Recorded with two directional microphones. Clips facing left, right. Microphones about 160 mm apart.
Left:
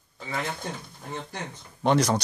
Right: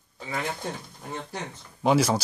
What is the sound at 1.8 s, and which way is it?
Speech, 5° right (ahead or behind).